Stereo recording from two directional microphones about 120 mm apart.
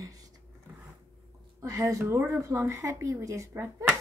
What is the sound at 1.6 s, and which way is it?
Speech, 25° right (ahead or behind).